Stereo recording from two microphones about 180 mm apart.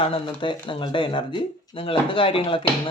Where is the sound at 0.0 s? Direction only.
30° left (ahead or behind).